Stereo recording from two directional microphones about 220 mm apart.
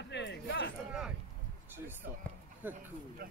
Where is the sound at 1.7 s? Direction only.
10° right (ahead or behind).